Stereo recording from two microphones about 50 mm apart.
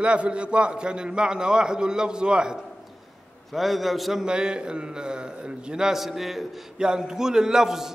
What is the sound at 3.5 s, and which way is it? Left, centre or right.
A man's voice, centre.